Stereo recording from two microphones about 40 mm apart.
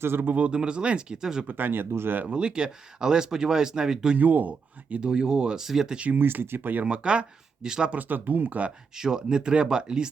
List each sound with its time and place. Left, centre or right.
0.0 s speech: right
0.5 s speech: right
1.5 s speech: right
2.2 s speech: right
4.2 s speech: right
4.9 s speech: right
6.1 s speech: right
6.8 s speech: right
7.9 s speech: right
9.0 s speech: centre